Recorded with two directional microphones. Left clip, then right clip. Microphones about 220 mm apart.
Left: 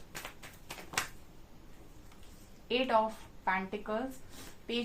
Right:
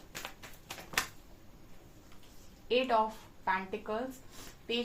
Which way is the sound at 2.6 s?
40° left (ahead or behind).